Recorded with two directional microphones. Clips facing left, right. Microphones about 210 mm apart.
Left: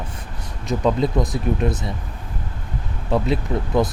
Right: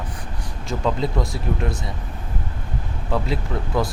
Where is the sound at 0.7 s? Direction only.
20° left (ahead or behind).